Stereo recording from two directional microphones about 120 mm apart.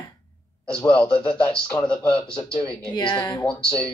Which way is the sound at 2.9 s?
35° left (ahead or behind).